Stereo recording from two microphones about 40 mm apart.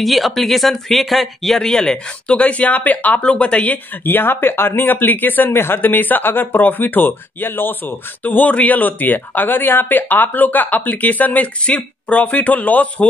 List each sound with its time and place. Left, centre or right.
0.0 s speech: centre
1.6 s speech: centre
2.2 s a man's voice: left
3.3 s a man's voice: left
4.0 s speech: left
5.5 s speech: left
8.2 s a man's voice: left